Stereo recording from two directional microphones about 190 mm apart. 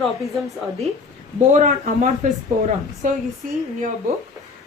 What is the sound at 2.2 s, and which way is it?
Speech, 40° right (ahead or behind).